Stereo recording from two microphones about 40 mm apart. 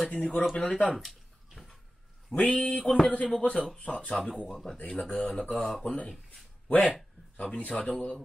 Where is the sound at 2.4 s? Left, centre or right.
Left.